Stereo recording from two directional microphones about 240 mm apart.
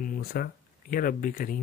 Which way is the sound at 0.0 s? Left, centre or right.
Left.